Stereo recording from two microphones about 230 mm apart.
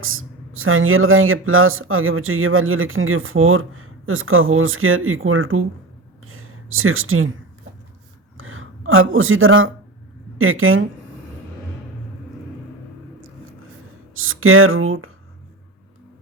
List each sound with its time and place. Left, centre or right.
0.0 s speech: right
6.2 s a sound: right
8.4 s speech: right
14.1 s speech: right